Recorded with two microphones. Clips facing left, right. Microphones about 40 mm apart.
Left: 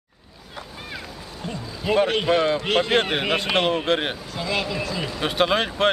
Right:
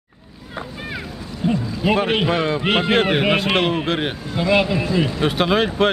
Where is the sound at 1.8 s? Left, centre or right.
Centre.